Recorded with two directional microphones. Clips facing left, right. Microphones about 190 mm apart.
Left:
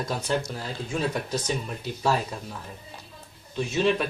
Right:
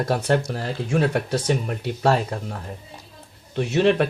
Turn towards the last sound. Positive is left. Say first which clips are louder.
# right 5 dB
turn(degrees=-65)  # may be behind; listen again after turning